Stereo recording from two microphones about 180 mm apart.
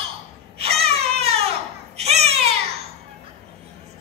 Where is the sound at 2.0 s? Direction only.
35° right (ahead or behind).